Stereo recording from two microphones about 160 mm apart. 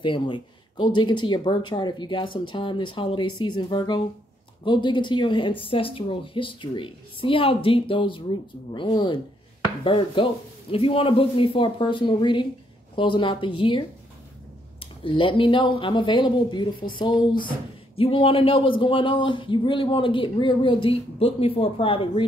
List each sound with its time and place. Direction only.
0.0 s speech: 30° left (ahead or behind)